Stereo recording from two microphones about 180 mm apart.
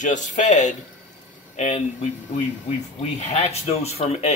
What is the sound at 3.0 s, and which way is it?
Speech, 35° left (ahead or behind).